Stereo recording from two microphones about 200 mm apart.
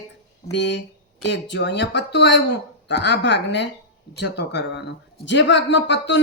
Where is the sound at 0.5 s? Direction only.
60° left (ahead or behind).